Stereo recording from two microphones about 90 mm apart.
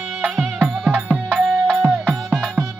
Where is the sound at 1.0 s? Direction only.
20° right (ahead or behind).